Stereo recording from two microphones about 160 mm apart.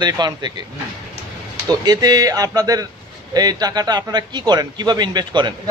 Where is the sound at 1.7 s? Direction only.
25° right (ahead or behind).